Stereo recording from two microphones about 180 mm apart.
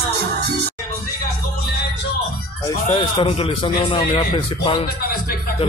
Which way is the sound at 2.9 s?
30° left (ahead or behind).